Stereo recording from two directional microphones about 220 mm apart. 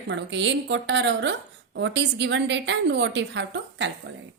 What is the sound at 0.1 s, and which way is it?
A woman's voice, 55° right (ahead or behind).